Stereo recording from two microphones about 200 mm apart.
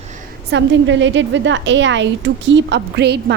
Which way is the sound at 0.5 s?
65° right (ahead or behind).